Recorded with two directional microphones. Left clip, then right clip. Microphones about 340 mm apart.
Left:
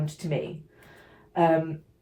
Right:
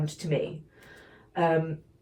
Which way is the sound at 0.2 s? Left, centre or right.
Centre.